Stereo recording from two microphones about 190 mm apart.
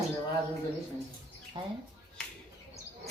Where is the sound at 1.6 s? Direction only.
25° right (ahead or behind).